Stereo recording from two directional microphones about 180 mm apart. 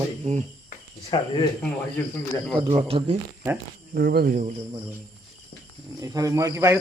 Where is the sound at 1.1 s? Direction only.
25° left (ahead or behind).